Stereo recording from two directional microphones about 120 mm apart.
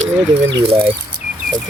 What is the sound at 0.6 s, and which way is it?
Speech, 50° right (ahead or behind).